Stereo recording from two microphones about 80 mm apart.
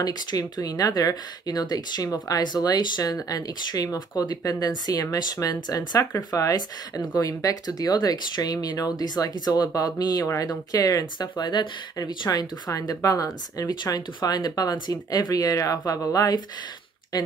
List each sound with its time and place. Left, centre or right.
0.0 s speech: left
2.4 s speech: left
9.7 s speech: left
11.1 s speech: left
12.3 s speech: left